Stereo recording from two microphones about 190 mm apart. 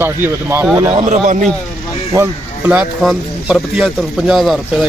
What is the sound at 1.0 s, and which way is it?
Speech, 40° right (ahead or behind).